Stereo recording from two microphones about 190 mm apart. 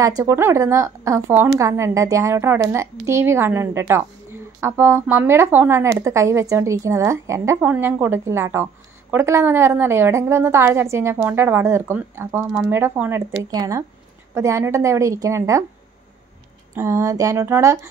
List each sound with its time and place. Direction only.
0.0 s a woman's voice: 15° right (ahead or behind)
16.7 s a woman's voice: 15° right (ahead or behind)